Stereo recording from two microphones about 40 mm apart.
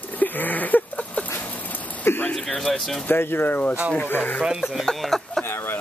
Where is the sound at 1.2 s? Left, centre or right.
Left.